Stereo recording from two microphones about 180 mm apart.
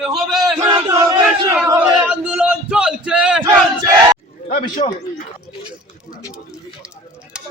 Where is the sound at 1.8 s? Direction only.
10° right (ahead or behind).